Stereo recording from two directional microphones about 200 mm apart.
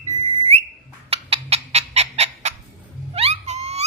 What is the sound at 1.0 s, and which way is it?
Fowl, 30° right (ahead or behind).